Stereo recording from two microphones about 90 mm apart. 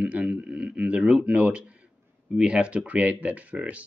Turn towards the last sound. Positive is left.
turn(degrees=-15)  # may be behind; listen again after turning